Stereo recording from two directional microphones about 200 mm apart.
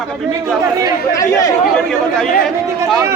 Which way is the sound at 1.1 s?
15° left (ahead or behind).